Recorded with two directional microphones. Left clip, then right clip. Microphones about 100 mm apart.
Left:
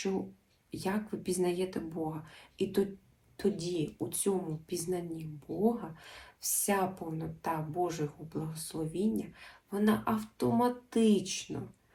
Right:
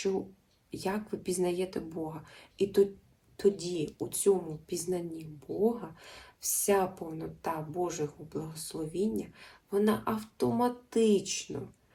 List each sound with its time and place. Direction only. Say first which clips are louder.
0.7 s speech: right 1 dB; 30° right (ahead or behind)